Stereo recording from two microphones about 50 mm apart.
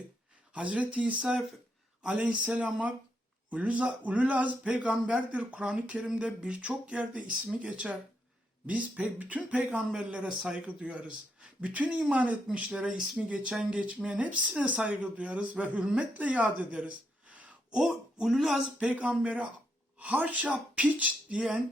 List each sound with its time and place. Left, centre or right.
0.5 s speech: right
9.9 s speech: centre
10.7 s speech: right
17.7 s speech: centre
18.3 s speech: centre
18.8 s speech: right